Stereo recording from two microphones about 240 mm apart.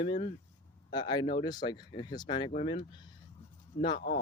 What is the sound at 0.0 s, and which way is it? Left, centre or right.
Speech, left.